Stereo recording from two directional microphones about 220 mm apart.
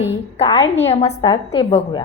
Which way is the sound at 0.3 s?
20° left (ahead or behind).